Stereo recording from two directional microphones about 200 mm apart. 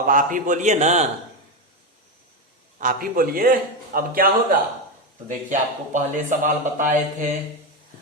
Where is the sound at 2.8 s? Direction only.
45° right (ahead or behind).